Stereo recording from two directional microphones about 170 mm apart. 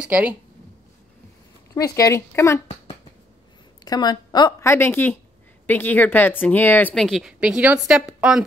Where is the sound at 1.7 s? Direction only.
20° left (ahead or behind).